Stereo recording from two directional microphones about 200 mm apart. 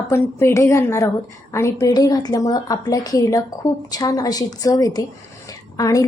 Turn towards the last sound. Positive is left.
turn(degrees=15)  # may be behind; listen again after turning